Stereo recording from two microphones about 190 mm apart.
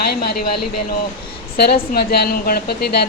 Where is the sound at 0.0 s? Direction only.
55° left (ahead or behind).